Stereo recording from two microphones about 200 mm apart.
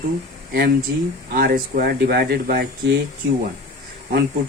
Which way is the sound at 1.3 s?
50° right (ahead or behind).